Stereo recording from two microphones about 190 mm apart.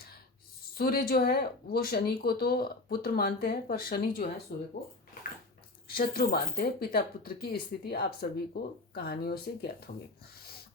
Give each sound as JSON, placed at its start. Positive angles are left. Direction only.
{"t": 0.8, "sound": "speech", "side_deg": 50}
{"t": 5.9, "sound": "speech", "side_deg": 50}